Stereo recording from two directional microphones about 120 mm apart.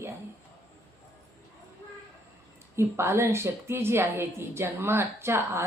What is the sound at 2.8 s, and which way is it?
Speech, 25° right (ahead or behind).